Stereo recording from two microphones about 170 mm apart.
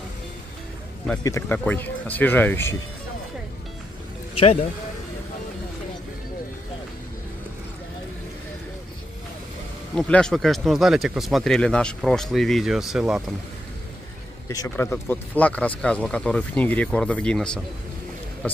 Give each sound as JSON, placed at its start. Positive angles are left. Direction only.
{"t": 1.2, "sound": "speech", "side_deg": 20}
{"t": 9.9, "sound": "speech", "side_deg": 5}
{"t": 14.5, "sound": "speech", "side_deg": 15}